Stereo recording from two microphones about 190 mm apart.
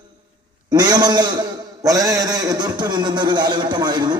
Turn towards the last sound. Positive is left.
turn(degrees=-20)  # may be behind; listen again after turning